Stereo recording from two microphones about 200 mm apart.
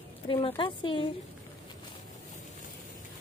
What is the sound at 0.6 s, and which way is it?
Speech, 25° left (ahead or behind).